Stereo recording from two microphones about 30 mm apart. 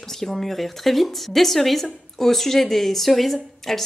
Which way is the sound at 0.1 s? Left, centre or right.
Centre.